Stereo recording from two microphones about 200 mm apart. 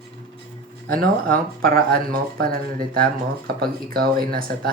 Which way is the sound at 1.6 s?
50° right (ahead or behind).